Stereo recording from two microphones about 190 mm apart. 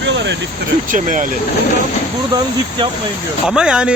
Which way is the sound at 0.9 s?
40° right (ahead or behind).